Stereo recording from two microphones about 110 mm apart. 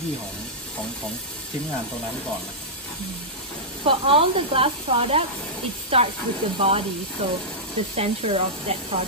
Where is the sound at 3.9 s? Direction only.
55° right (ahead or behind).